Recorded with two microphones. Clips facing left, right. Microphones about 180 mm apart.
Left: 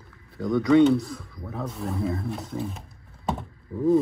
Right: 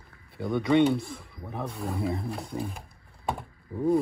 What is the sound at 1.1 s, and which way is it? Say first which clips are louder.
Speech: left 2 dB; centre (ahead or behind).